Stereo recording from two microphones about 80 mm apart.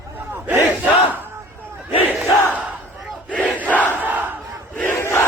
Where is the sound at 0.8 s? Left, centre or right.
Right.